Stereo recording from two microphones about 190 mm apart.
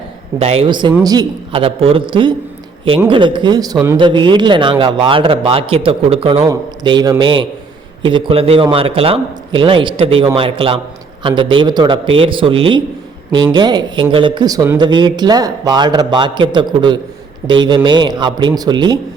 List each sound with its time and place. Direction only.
0.3 s speech: 30° right (ahead or behind)